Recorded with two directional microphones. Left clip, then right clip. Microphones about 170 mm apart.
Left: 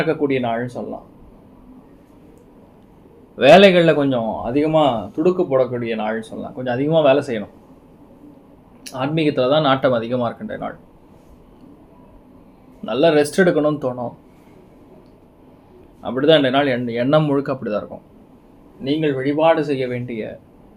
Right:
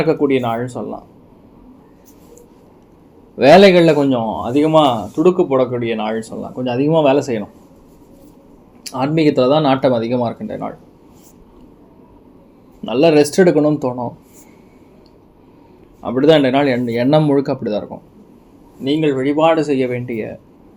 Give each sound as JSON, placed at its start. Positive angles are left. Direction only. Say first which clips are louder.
{"t": 0.0, "sound": "speech", "louder": "right 4 dB", "side_deg": -30}
{"t": 3.3, "sound": "speech", "louder": "right 2 dB", "side_deg": -15}
{"t": 4.4, "sound": "speech", "louder": "right 4 dB", "side_deg": -35}
{"t": 8.8, "sound": "speech", "louder": "right 5 dB", "side_deg": -30}
{"t": 12.8, "sound": "speech", "louder": "right 3 dB", "side_deg": -25}
{"t": 16.0, "sound": "speech", "louder": "right 3 dB", "side_deg": -30}
{"t": 18.9, "sound": "speech", "louder": "right 3 dB", "side_deg": -35}